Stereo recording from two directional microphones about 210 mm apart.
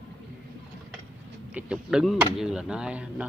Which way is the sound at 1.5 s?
5° right (ahead or behind).